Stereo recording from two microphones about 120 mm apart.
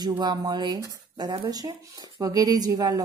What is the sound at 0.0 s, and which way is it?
A woman's voice, 35° right (ahead or behind).